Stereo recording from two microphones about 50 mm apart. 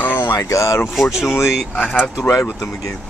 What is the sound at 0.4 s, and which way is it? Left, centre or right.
Speech, left.